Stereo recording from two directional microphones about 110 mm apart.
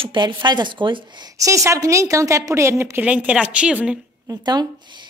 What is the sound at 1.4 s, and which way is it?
A woman's voice, 30° right (ahead or behind).